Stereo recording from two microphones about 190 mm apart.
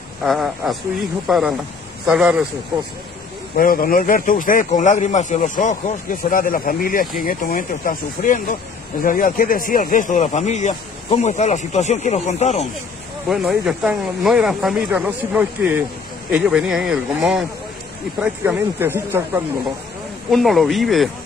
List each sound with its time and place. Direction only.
0.2 s speech: centre (ahead or behind)
3.5 s speech: 50° left (ahead or behind)
13.3 s speech: centre (ahead or behind)
20.2 s speech: centre (ahead or behind)